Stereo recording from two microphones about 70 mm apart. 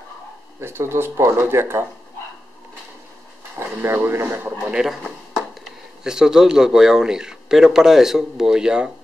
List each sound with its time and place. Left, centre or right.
0.6 s speech: right
3.5 s speech: right
4.6 s speech: centre